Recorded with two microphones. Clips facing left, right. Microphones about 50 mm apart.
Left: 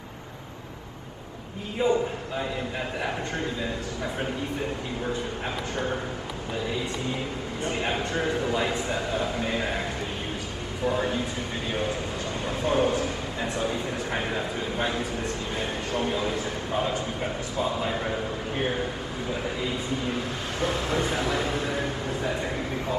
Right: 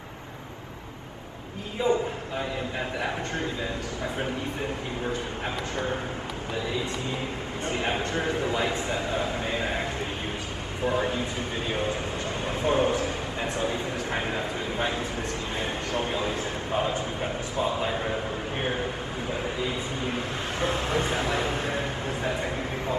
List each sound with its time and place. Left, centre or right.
1.8 s a man's voice: left
7.6 s a man's voice: right
10.9 s a man's voice: right
19.6 s a man's voice: right